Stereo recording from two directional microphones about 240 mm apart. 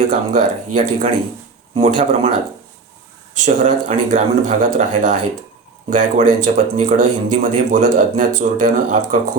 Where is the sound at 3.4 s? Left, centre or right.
Right.